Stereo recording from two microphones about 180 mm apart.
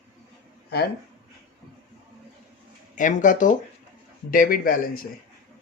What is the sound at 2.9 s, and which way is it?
Speech, 45° left (ahead or behind).